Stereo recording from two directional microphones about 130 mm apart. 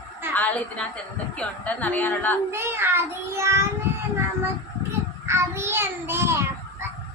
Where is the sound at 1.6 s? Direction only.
10° left (ahead or behind).